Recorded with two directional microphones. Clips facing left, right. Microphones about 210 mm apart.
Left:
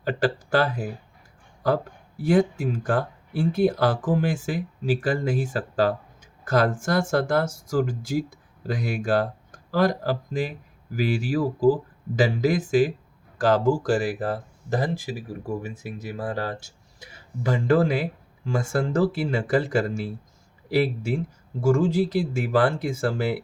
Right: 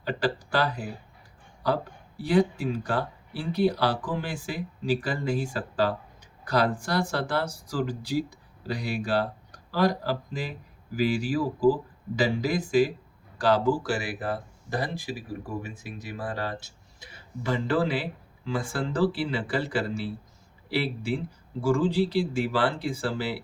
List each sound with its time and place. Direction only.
0.2 s speech: 45° left (ahead or behind)
2.2 s speech: 45° left (ahead or behind)